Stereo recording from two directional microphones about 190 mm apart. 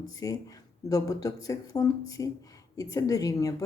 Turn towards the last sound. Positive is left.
turn(degrees=20)  # may be behind; listen again after turning